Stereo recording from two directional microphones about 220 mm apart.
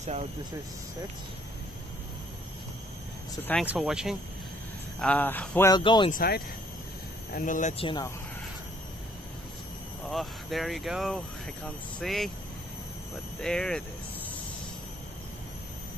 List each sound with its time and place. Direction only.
3.6 s speech: 5° right (ahead or behind)
5.7 s speech: 20° left (ahead or behind)
6.1 s speech: 45° left (ahead or behind); by 8.1 s 20° left (ahead or behind)
10.0 s speech: centre (ahead or behind)
13.4 s speech: 5° left (ahead or behind)